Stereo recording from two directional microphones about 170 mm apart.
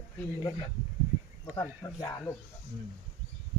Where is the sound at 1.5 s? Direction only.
20° left (ahead or behind).